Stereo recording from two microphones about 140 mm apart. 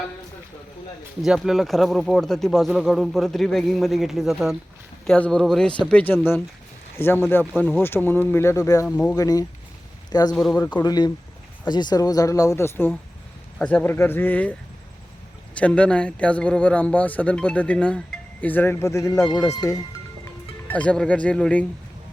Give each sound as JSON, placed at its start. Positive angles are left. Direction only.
{"t": 1.2, "sound": "a man's voice", "side_deg": 0}
{"t": 15.5, "sound": "a man's voice", "side_deg": 10}
{"t": 20.7, "sound": "a man's voice", "side_deg": 10}